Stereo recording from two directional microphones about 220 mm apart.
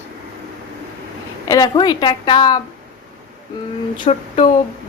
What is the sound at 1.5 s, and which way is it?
A woman's voice, 20° left (ahead or behind).